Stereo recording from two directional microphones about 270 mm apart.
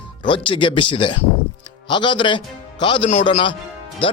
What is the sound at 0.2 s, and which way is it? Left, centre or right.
A man's voice, centre.